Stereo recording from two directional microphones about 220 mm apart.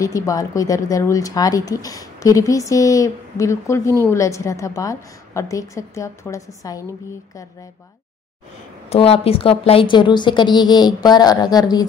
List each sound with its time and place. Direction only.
0.0 s speech: 15° left (ahead or behind)
8.8 s a woman's voice: 25° left (ahead or behind)